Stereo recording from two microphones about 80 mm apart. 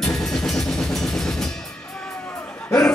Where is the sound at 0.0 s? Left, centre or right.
Centre.